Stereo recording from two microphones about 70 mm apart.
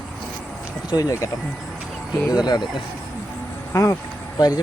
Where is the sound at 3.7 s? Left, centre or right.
Left.